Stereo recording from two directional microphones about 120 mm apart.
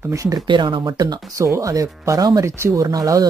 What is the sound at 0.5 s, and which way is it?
Speech, 40° right (ahead or behind).